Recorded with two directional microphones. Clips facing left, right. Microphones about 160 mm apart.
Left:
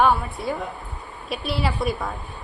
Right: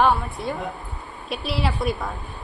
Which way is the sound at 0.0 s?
Centre (ahead or behind).